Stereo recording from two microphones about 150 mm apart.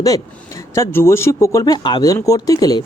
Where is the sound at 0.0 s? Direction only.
20° left (ahead or behind).